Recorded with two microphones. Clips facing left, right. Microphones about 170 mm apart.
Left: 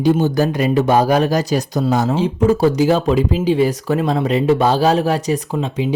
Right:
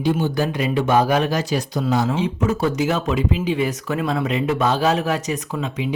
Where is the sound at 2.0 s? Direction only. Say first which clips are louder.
Left 6 dB; 35° left (ahead or behind).